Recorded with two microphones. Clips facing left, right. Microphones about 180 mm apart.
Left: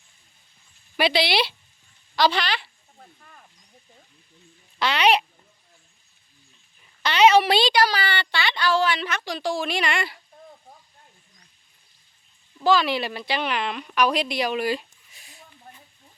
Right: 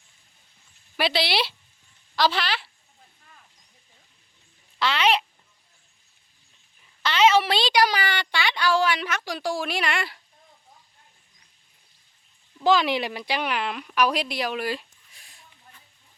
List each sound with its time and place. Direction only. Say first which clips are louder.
0.9 s speech: left 3 dB; centre (ahead or behind)
3.0 s snake: left 6 dB; 55° left (ahead or behind)
4.8 s speech: left 2 dB; 15° left (ahead or behind)
7.0 s a sound: left 3 dB; 15° left (ahead or behind)
7.7 s speech: even; 15° right (ahead or behind)
12.6 s speech: even; 15° right (ahead or behind); by 15.4 s centre (ahead or behind)
15.7 s a sound: left 8 dB; 50° left (ahead or behind)